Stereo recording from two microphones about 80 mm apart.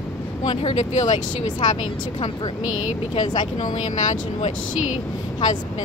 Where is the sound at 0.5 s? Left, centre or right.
Left.